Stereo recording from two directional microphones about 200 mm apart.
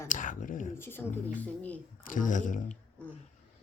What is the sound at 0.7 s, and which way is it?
Speech, 10° left (ahead or behind).